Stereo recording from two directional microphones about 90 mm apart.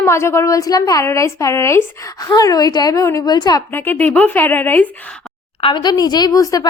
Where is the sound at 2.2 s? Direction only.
40° left (ahead or behind).